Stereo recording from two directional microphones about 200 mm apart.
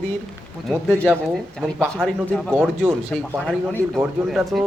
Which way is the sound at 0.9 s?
5° left (ahead or behind).